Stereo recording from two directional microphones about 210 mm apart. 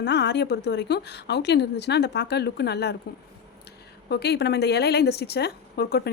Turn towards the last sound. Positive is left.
turn(degrees=50)  # may be behind; listen again after turning